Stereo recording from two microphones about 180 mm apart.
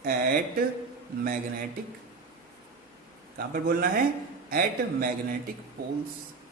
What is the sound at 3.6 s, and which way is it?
A man's voice, 50° right (ahead or behind).